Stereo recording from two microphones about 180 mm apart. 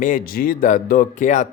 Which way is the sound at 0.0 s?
50° left (ahead or behind).